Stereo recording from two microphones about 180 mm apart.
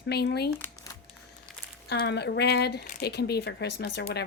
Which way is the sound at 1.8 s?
65° left (ahead or behind).